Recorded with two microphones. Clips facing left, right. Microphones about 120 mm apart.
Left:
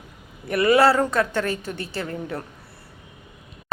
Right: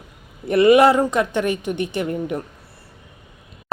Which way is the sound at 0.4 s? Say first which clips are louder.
Right 5 dB; 25° right (ahead or behind).